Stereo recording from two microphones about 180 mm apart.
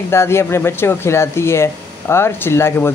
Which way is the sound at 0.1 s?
15° left (ahead or behind).